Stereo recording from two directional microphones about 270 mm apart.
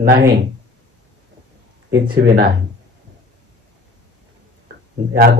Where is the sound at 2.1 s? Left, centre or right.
Right.